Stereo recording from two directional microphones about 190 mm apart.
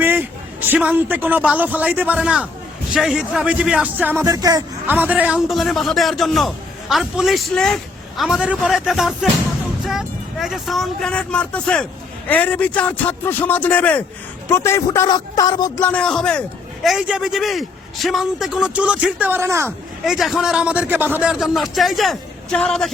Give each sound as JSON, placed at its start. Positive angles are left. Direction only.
{"t": 0.0, "sound": "a sound", "side_deg": -10}
{"t": 0.7, "sound": "speech", "side_deg": -10}
{"t": 4.9, "sound": "a man's voice", "side_deg": -10}
{"t": 15.8, "sound": "a man's voice", "side_deg": 5}
{"t": 20.1, "sound": "a man's voice", "side_deg": 0}